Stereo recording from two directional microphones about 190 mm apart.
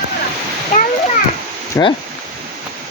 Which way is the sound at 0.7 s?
45° left (ahead or behind).